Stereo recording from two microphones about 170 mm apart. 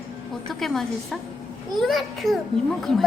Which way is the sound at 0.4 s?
Centre (ahead or behind).